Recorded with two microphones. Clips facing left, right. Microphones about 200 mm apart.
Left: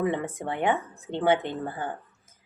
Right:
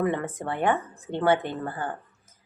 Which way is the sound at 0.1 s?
15° left (ahead or behind).